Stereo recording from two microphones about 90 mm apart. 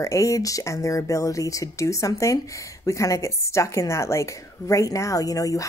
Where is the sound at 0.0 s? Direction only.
35° left (ahead or behind).